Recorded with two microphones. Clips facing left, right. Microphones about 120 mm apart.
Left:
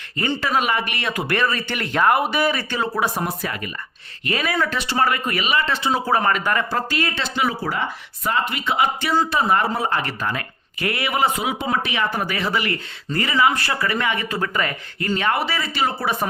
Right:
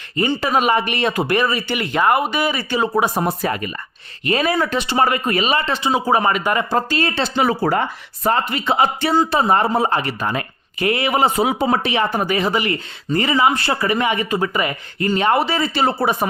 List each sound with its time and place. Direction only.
0.2 s speech: 20° right (ahead or behind)
1.4 s speech: 10° right (ahead or behind); by 5.6 s 30° right (ahead or behind)
5.6 s speech: 20° right (ahead or behind)